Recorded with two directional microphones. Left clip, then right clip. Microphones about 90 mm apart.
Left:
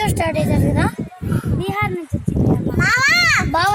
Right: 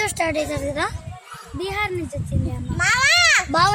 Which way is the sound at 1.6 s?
40° right (ahead or behind).